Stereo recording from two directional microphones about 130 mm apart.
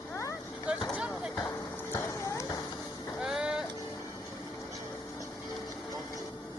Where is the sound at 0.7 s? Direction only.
10° right (ahead or behind).